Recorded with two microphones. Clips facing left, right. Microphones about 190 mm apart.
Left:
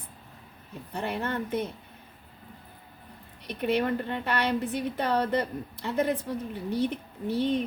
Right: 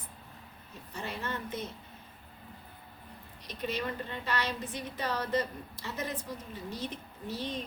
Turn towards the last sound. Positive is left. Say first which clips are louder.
# left 10 dB
turn(degrees=60)  # may be behind; listen again after turning